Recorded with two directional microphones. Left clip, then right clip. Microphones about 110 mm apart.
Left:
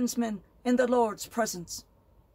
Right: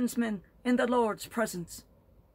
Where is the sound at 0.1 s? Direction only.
5° right (ahead or behind).